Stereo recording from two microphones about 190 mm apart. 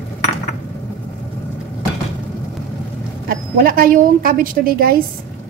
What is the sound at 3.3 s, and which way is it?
A woman's voice, 50° right (ahead or behind).